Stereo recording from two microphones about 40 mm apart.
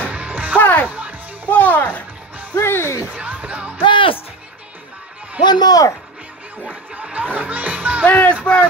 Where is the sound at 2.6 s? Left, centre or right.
Left.